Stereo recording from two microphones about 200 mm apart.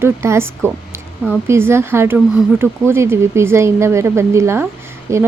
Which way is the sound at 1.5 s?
10° right (ahead or behind).